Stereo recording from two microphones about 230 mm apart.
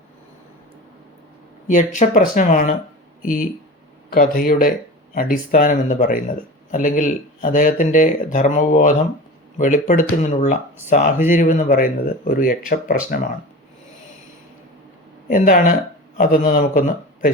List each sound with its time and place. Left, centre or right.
1.6 s speech: left
4.1 s speech: left
15.3 s speech: left